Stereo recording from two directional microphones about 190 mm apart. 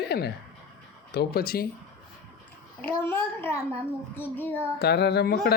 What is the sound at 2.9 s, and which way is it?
Speech, 10° left (ahead or behind).